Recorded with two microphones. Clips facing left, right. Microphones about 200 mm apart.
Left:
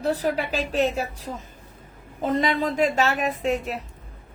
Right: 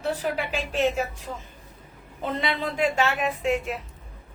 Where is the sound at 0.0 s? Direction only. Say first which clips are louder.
Left 3 dB; 40° left (ahead or behind).